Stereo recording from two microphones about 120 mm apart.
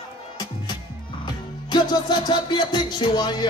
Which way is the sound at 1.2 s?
35° left (ahead or behind).